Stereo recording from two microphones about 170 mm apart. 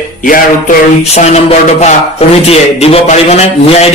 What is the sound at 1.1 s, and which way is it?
A man's voice, 40° left (ahead or behind).